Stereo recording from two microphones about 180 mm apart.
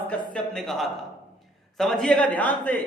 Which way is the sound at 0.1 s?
5° left (ahead or behind).